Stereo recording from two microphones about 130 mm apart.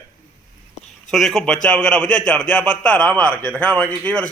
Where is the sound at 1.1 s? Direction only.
Centre (ahead or behind).